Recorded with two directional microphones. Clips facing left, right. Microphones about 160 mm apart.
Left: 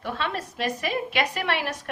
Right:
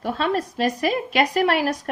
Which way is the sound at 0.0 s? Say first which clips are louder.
Right 7 dB; 35° right (ahead or behind).